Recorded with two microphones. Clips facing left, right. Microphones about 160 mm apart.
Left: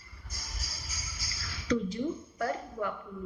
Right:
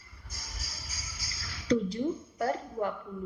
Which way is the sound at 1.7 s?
30° right (ahead or behind).